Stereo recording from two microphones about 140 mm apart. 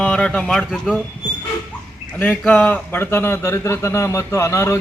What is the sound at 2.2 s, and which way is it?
A man's voice, 15° left (ahead or behind).